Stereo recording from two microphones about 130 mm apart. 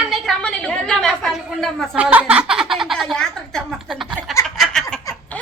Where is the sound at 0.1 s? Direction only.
5° left (ahead or behind).